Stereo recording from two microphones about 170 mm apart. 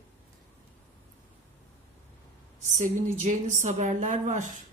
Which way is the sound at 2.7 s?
45° right (ahead or behind).